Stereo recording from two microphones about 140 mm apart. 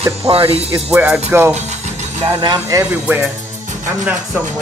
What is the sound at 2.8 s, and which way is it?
Speech, 10° right (ahead or behind).